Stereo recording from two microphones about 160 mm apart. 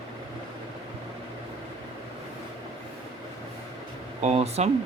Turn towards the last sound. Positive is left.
turn(degrees=-40)  # may be behind; listen again after turning